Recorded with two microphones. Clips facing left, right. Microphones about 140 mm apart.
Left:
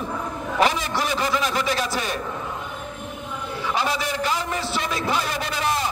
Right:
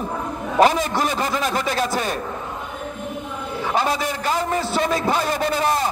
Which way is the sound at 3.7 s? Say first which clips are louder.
Right 3 dB; 45° right (ahead or behind).